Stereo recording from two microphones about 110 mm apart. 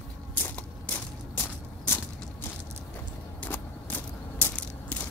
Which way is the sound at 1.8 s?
20° left (ahead or behind).